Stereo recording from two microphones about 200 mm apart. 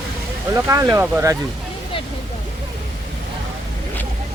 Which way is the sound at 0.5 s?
15° right (ahead or behind).